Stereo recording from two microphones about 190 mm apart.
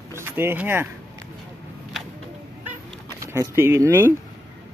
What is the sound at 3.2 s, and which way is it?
Speech, 15° right (ahead or behind).